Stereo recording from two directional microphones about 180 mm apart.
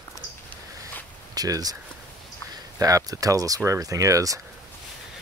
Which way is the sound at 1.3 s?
20° right (ahead or behind).